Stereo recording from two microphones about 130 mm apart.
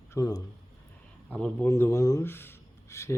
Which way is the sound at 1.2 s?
10° left (ahead or behind).